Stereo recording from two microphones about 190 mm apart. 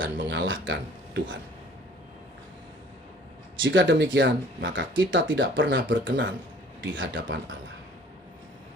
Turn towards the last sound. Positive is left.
turn(degrees=-80)